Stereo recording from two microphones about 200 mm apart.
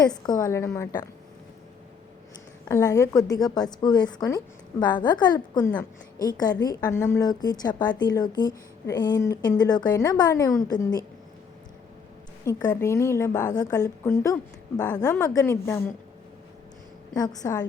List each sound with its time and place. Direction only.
0.0 s a woman's voice: 20° left (ahead or behind)
2.6 s a woman's voice: 15° left (ahead or behind)
12.5 s a woman's voice: 15° left (ahead or behind)
17.2 s a woman's voice: 20° left (ahead or behind)